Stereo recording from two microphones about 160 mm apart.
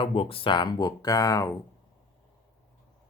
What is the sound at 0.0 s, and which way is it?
Speech, 35° left (ahead or behind).